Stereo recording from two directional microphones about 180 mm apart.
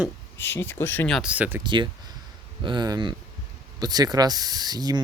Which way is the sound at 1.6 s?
25° right (ahead or behind).